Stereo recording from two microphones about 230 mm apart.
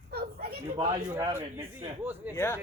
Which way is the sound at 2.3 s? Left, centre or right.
Centre.